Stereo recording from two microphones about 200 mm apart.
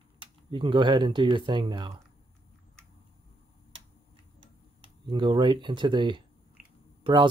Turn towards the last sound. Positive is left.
turn(degrees=-25)  # may be behind; listen again after turning